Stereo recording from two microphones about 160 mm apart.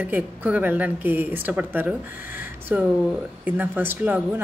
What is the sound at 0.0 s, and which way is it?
Speech, 10° right (ahead or behind).